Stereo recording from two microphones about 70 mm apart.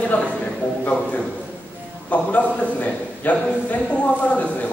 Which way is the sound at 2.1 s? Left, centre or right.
Left.